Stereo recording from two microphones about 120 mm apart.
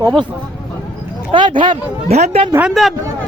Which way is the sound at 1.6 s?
65° right (ahead or behind).